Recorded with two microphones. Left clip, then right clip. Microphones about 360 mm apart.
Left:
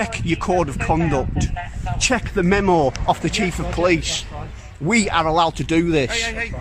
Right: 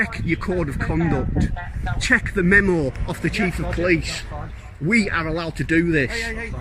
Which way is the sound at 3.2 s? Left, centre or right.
Left.